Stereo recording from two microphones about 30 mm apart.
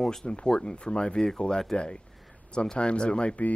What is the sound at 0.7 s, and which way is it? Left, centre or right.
Speech, left.